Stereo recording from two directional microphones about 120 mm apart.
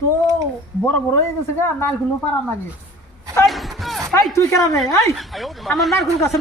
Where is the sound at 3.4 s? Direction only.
Centre (ahead or behind).